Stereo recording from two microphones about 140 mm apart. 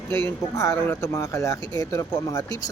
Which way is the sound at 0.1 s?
20° left (ahead or behind).